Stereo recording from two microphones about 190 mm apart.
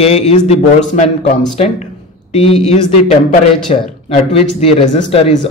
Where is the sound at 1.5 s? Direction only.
35° left (ahead or behind).